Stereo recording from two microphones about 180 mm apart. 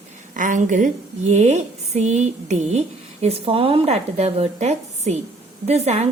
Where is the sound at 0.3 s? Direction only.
45° right (ahead or behind).